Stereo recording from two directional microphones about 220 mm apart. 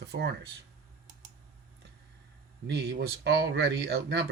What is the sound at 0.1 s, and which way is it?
Speech, 40° right (ahead or behind).